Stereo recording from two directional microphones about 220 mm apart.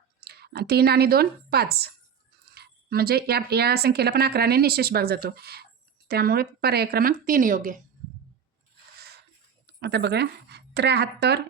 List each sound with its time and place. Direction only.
0.2 s speech: 45° right (ahead or behind)
9.8 s speech: 50° right (ahead or behind)